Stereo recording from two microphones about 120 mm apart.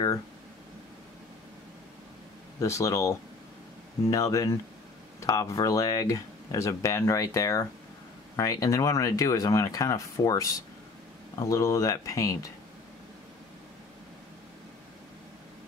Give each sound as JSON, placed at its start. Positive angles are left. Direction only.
{"t": 2.6, "sound": "speech", "side_deg": 25}